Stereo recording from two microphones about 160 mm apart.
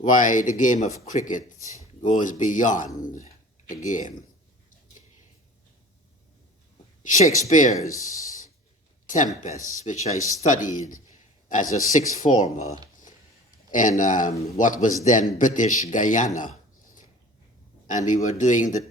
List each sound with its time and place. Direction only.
0.0 s a man's voice: 55° left (ahead or behind)
1.5 s speech: 20° right (ahead or behind)
2.0 s a man's voice: 50° left (ahead or behind)
7.4 s a man's voice: 50° left (ahead or behind)
7.7 s speech: 20° left (ahead or behind)
9.0 s a man's voice: 50° left (ahead or behind)
13.7 s a man's voice: 55° left (ahead or behind)
17.8 s a man's voice: 50° left (ahead or behind)